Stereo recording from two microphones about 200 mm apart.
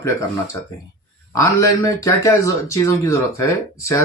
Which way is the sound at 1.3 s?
15° left (ahead or behind).